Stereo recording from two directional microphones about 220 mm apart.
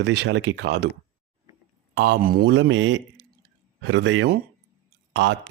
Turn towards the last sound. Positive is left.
turn(degrees=-55)  # may be behind; listen again after turning